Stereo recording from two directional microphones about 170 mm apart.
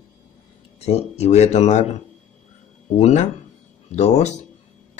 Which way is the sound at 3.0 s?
40° left (ahead or behind).